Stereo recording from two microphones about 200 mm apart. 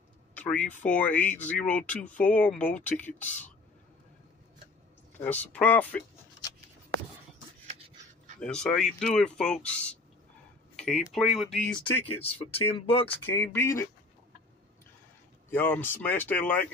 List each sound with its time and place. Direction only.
0.3 s a sound: 5° left (ahead or behind)
0.8 s speech: 5° left (ahead or behind)
5.2 s speech: 10° left (ahead or behind)
8.4 s speech: 5° left (ahead or behind)
12.5 s speech: 30° left (ahead or behind)
13.2 s speech: 10° left (ahead or behind)
15.5 s speech: 10° left (ahead or behind)